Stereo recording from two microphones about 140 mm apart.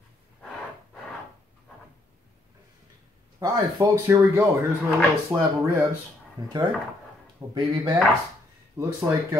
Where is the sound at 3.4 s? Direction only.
25° right (ahead or behind).